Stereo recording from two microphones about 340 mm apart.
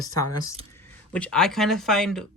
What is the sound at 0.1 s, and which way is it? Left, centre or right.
Speech, centre.